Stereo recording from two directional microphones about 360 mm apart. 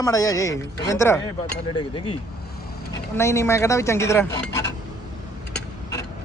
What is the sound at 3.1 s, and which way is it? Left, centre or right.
A woman's voice, centre.